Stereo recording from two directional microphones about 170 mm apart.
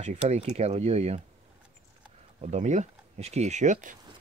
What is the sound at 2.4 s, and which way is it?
Speech, 45° right (ahead or behind).